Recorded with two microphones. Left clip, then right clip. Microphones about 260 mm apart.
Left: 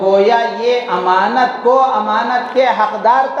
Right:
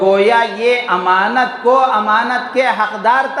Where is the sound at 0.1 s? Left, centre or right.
Right.